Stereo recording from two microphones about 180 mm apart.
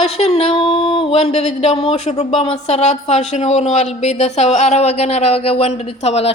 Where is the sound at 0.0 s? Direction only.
35° left (ahead or behind).